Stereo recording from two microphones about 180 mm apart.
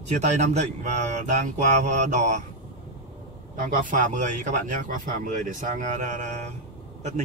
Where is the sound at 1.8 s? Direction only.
45° right (ahead or behind).